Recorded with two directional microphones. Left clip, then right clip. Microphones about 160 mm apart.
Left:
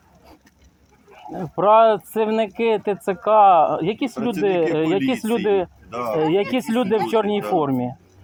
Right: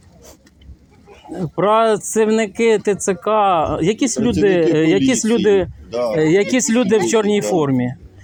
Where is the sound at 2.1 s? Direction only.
55° right (ahead or behind).